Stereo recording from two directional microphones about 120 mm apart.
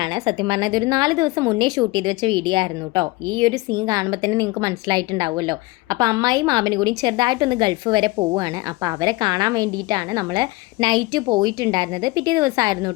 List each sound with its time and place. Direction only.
0.0 s a woman's voice: 40° right (ahead or behind)